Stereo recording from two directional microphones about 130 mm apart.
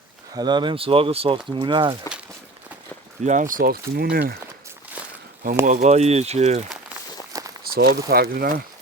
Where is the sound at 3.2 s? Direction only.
80° right.